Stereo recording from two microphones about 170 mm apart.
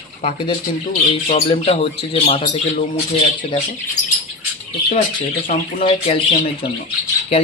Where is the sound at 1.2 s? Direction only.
35° left (ahead or behind).